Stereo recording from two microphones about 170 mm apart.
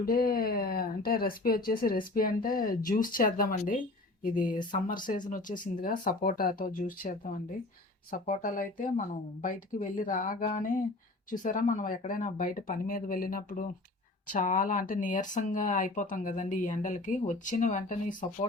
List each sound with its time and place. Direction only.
0.0 s speech: 60° left (ahead or behind)